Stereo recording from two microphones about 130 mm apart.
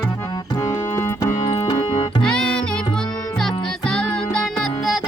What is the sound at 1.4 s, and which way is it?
Music, 40° left (ahead or behind).